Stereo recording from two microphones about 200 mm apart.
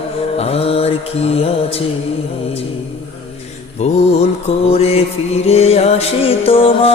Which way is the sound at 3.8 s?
35° left (ahead or behind).